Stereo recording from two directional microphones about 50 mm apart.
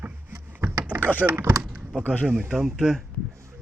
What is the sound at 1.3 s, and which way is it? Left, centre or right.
Speech, right.